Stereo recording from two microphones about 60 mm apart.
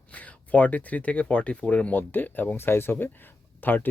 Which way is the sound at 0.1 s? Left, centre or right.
Left.